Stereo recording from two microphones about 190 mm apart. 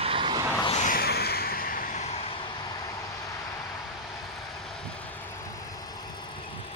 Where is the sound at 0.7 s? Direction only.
35° left (ahead or behind).